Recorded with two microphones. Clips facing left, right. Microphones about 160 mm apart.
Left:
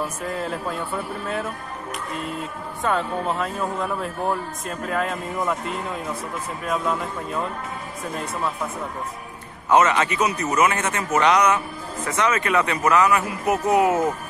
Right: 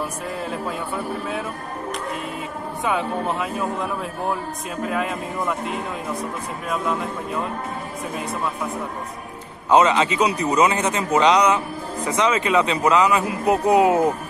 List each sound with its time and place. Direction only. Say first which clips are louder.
0.3 s a man's voice: even; centre (ahead or behind)
2.8 s a man's voice: even; 5° right (ahead or behind)
6.7 s a man's voice: even; centre (ahead or behind)
9.7 s a man's voice: right 2 dB; 15° right (ahead or behind)